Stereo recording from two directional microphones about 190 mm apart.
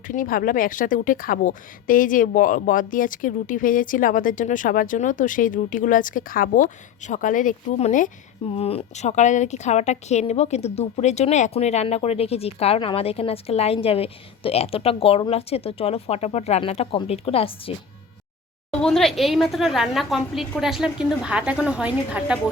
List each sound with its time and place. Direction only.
0.1 s a woman's voice: 45° left (ahead or behind); by 17.7 s 30° left (ahead or behind)
18.7 s a woman's voice: 5° left (ahead or behind)